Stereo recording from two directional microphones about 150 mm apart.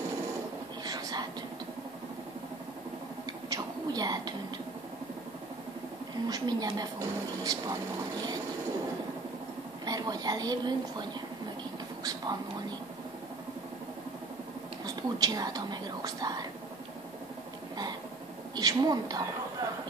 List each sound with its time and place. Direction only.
0.8 s whispering: 25° right (ahead or behind)
3.4 s a sound: 25° right (ahead or behind)
6.2 s speech: 25° right (ahead or behind)
9.8 s a woman's voice: 25° right (ahead or behind)
12.0 s whispering: 25° right (ahead or behind)
15.1 s speech: 25° right (ahead or behind)
18.5 s speech: 25° right (ahead or behind)